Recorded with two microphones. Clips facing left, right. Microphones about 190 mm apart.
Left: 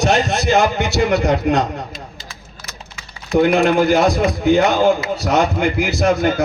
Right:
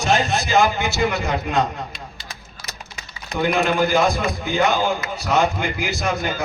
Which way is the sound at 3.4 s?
65° left (ahead or behind).